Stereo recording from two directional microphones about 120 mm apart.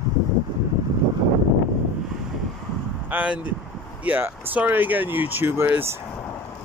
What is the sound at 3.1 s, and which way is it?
Speech, 10° right (ahead or behind).